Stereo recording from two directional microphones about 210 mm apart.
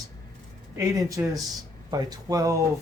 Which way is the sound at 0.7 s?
15° right (ahead or behind).